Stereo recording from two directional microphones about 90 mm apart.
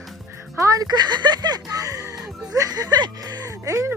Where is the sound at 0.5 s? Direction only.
40° right (ahead or behind).